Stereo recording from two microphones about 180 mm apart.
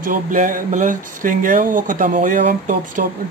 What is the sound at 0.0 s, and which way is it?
Speech, 50° right (ahead or behind).